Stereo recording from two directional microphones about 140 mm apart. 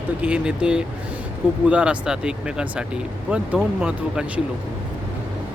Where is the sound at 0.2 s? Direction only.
10° right (ahead or behind).